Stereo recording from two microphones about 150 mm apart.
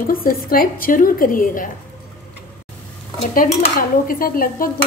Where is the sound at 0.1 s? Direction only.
75° left (ahead or behind).